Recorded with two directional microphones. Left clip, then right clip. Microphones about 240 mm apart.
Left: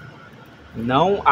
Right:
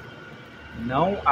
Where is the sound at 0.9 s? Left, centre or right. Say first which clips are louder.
Left 6 dB; left.